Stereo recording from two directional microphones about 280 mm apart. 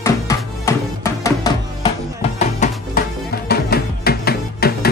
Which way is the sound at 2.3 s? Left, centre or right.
Left.